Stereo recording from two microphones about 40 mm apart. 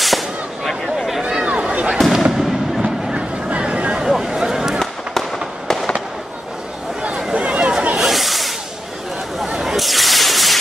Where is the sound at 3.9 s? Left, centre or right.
Centre.